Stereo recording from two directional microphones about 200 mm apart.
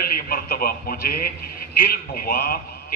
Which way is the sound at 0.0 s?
50° left (ahead or behind).